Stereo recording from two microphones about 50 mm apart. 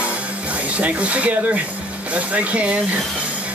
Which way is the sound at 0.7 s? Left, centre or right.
Right.